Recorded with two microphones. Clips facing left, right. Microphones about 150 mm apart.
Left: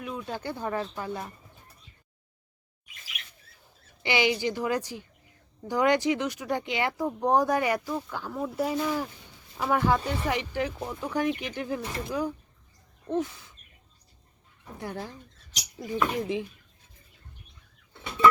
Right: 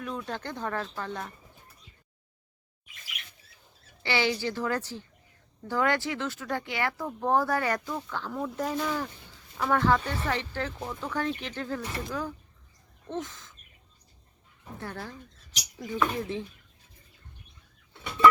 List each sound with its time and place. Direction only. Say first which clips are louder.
0.0 s speech: left 1 dB; 5° left (ahead or behind)
4.0 s speech: left 2 dB; 15° left (ahead or behind)
13.1 s a sound: left 6 dB; 10° left (ahead or behind)
14.8 s speech: left 3 dB; 15° left (ahead or behind)